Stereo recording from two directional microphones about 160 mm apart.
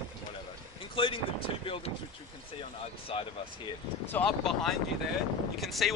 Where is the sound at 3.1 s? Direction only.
35° left (ahead or behind).